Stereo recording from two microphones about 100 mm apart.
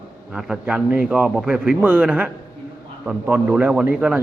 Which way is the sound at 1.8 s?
15° right (ahead or behind).